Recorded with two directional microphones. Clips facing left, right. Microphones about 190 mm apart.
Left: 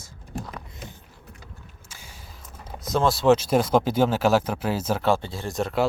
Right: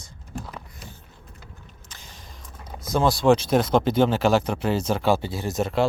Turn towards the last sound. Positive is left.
turn(degrees=0)  # may be behind; listen again after turning